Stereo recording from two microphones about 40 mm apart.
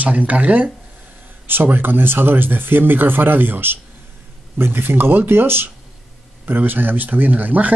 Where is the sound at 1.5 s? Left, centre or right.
Right.